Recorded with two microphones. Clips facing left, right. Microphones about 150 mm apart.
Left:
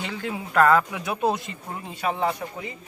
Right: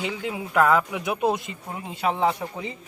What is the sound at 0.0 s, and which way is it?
Speech, 15° right (ahead or behind).